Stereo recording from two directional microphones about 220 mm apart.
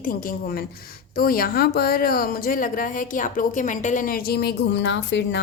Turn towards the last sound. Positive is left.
turn(degrees=55)  # may be behind; listen again after turning